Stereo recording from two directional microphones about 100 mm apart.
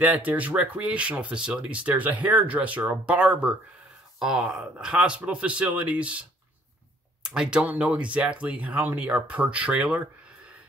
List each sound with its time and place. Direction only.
0.0 s speech: 15° right (ahead or behind)
7.2 s speech: 10° right (ahead or behind)